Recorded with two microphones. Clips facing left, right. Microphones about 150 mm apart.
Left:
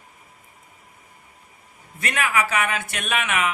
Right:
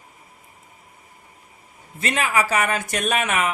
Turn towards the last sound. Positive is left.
turn(degrees=-40)  # may be behind; listen again after turning